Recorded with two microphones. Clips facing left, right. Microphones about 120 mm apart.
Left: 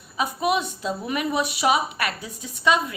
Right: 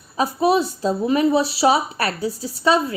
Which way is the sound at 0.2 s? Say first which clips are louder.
Right 6 dB; 30° right (ahead or behind).